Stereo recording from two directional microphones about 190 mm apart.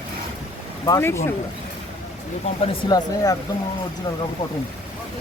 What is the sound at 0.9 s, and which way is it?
Speech, 15° left (ahead or behind).